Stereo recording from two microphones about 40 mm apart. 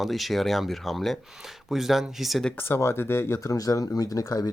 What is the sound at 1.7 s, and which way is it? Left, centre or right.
Speech, centre.